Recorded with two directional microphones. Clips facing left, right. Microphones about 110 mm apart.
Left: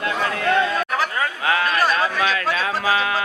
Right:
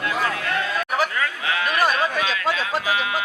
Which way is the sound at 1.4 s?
45° left (ahead or behind).